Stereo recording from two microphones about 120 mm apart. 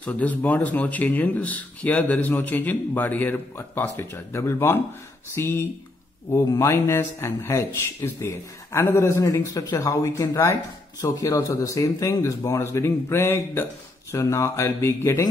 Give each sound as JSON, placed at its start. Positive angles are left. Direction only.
{"t": 0.0, "sound": "speech", "side_deg": 10}